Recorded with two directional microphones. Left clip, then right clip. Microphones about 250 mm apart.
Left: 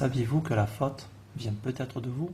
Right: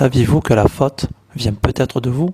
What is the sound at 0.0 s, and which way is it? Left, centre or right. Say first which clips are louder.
Speech: right 15 dB; right.